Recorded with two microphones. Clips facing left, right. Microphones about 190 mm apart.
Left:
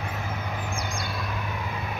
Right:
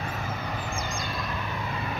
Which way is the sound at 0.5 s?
10° left (ahead or behind).